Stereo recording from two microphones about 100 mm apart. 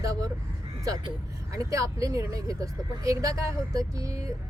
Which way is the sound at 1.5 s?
35° right (ahead or behind).